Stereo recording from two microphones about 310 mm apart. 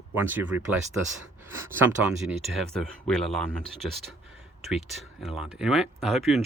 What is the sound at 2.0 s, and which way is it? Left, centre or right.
Speech, centre.